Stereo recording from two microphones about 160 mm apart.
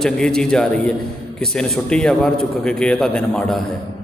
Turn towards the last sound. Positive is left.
turn(degrees=5)  # may be behind; listen again after turning